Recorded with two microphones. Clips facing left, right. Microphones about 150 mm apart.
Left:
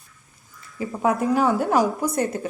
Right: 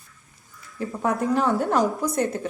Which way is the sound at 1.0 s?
5° left (ahead or behind).